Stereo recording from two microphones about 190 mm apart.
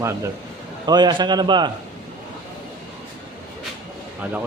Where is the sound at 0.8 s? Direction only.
20° right (ahead or behind).